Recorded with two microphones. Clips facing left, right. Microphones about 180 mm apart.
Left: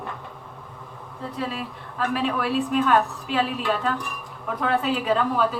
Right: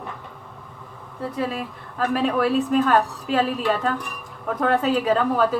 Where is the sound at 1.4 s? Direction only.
45° right (ahead or behind).